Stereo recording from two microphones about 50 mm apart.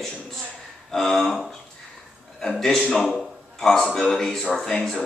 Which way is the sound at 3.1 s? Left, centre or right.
Centre.